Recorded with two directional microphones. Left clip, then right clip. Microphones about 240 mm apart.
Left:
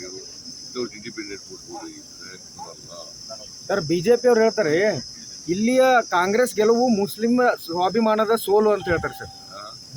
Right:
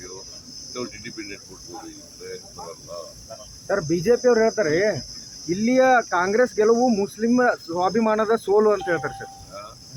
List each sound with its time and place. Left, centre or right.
0.7 s speech: centre
3.7 s speech: left